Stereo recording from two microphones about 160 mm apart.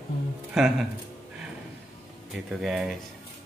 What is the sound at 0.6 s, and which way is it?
Speech, 5° right (ahead or behind).